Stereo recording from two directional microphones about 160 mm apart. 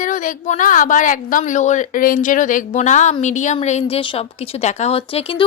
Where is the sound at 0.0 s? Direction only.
55° left (ahead or behind).